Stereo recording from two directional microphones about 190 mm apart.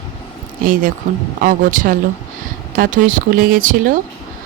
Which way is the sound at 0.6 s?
45° right (ahead or behind).